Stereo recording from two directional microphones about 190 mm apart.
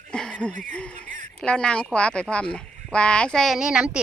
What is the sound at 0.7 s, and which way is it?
Speech, 5° left (ahead or behind).